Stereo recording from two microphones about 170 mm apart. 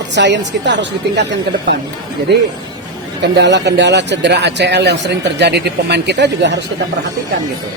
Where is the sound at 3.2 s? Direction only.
90° right.